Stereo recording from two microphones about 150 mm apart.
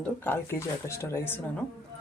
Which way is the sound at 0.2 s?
15° left (ahead or behind).